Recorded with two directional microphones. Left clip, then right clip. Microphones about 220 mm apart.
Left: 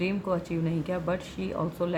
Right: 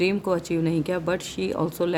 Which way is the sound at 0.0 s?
50° right (ahead or behind).